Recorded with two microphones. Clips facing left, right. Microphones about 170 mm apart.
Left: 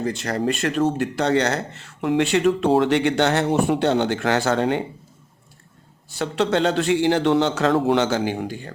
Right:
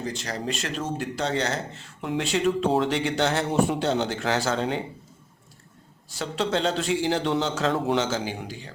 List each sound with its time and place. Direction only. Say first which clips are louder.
0.0 s speech: left 7 dB; 60° left (ahead or behind)
6.1 s speech: left 5 dB; 65° left (ahead or behind)